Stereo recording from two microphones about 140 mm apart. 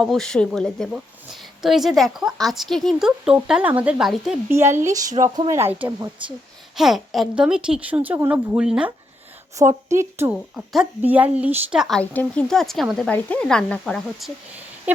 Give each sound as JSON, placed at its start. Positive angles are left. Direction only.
{"t": 0.0, "sound": "a woman's voice", "side_deg": 0}
{"t": 4.4, "sound": "a woman's voice", "side_deg": -15}
{"t": 6.7, "sound": "a woman's voice", "side_deg": 0}
{"t": 9.6, "sound": "a woman's voice", "side_deg": -20}
{"t": 10.5, "sound": "a woman's voice", "side_deg": 0}
{"t": 11.9, "sound": "a woman's voice", "side_deg": 10}